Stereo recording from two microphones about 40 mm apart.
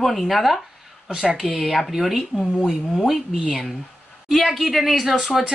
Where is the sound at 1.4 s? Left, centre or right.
Centre.